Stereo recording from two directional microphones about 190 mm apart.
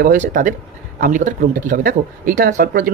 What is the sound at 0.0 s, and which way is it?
Speech, 45° right (ahead or behind).